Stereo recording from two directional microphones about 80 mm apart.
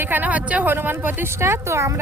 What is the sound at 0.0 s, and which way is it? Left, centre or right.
A woman's voice, right.